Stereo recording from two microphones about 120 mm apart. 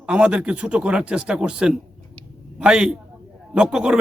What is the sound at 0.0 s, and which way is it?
A man's voice, 10° right (ahead or behind).